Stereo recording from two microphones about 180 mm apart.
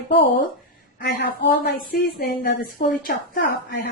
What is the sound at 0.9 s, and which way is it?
A woman's voice, 55° left (ahead or behind).